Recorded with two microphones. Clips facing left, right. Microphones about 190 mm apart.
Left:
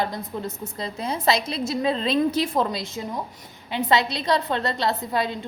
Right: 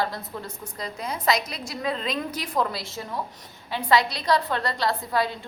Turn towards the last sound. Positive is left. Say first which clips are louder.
# left 1 dB
turn(degrees=20)  # may be behind; listen again after turning